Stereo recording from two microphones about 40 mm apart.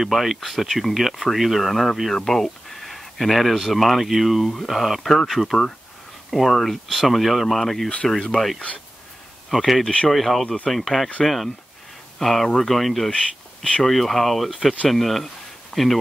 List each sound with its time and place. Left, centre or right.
0.0 s speech: centre
10.4 s speech: centre
10.7 s speech: centre